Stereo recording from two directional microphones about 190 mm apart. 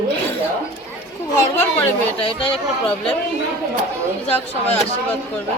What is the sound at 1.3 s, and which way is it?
Speech, 10° left (ahead or behind).